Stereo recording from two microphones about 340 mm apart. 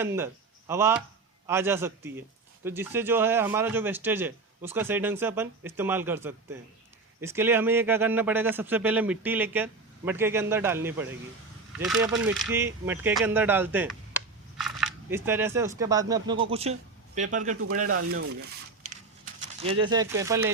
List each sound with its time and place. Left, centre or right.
0.0 s a man's voice: centre
19.6 s a man's voice: centre